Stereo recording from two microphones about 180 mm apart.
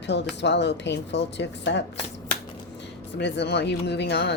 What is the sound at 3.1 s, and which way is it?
Speech, 70° left (ahead or behind).